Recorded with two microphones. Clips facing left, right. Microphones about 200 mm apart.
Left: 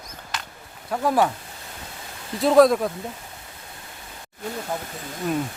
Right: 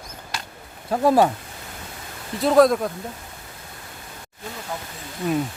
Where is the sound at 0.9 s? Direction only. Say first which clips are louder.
Right 4 dB; 30° right (ahead or behind).